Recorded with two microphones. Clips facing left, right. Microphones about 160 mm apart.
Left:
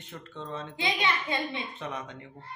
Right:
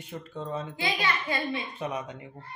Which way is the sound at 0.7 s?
20° left (ahead or behind).